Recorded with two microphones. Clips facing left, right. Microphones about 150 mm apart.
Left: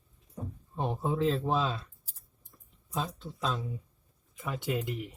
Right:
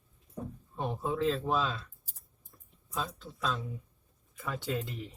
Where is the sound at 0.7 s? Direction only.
20° left (ahead or behind).